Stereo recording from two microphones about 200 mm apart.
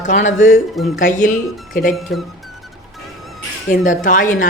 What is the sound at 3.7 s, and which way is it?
Speech, 40° left (ahead or behind).